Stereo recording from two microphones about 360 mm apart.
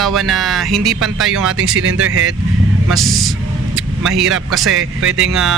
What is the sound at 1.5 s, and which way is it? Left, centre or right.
Speech, right.